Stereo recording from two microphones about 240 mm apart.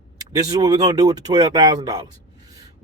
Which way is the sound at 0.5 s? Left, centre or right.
Centre.